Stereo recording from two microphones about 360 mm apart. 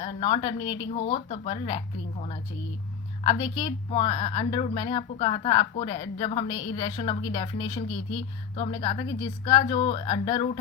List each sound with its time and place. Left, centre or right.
0.0 s a woman's voice: centre
3.4 s a woman's voice: centre